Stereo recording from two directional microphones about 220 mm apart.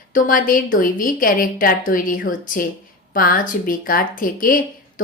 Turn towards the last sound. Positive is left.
turn(degrees=40)  # may be behind; listen again after turning